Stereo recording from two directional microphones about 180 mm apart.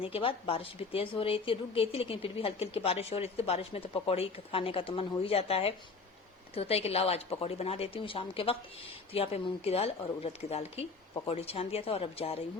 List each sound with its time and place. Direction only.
0.0 s speech: 30° left (ahead or behind)